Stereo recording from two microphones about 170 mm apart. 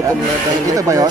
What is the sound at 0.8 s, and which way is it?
Speech, 20° right (ahead or behind).